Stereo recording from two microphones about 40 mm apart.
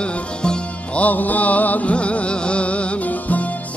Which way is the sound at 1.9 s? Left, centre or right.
Left.